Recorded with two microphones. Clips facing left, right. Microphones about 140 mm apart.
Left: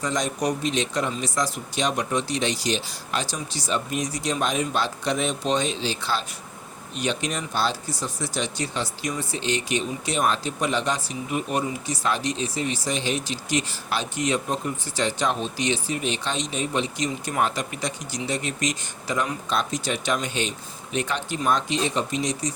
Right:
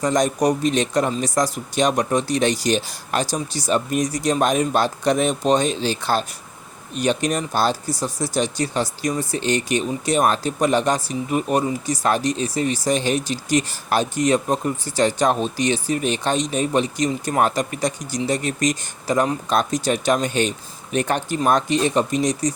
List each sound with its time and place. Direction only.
0.0 s speech: 45° right (ahead or behind)